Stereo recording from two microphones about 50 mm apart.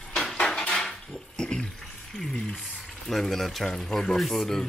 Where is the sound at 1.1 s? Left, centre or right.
Centre.